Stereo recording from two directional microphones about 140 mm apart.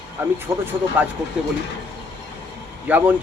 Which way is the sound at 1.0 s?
10° right (ahead or behind).